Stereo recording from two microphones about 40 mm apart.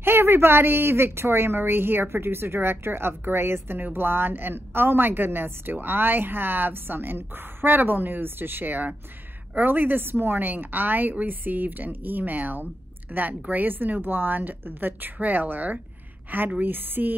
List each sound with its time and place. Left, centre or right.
0.0 s speech: right
3.9 s a woman's voice: right